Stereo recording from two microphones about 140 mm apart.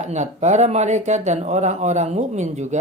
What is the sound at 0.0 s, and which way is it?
A man's voice, 55° right (ahead or behind).